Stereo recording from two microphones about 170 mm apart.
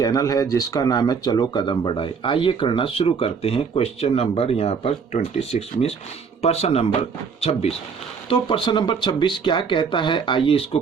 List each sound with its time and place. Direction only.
0.0 s speech: 20° left (ahead or behind)